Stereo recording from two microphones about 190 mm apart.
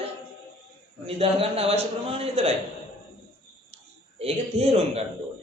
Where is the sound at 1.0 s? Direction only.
30° right (ahead or behind).